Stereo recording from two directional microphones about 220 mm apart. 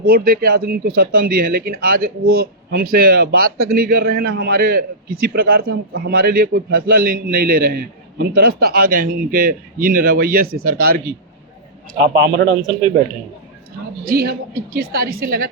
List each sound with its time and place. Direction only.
0.0 s speech: 45° right (ahead or behind)
12.1 s speech: 50° right (ahead or behind)
14.0 s speech: 45° right (ahead or behind)